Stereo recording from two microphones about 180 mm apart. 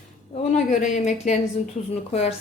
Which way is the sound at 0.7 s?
40° left (ahead or behind).